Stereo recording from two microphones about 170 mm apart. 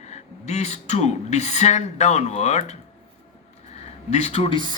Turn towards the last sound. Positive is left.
turn(degrees=30)  # may be behind; listen again after turning